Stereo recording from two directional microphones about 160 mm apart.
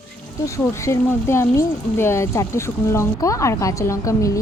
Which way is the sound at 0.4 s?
20° left (ahead or behind).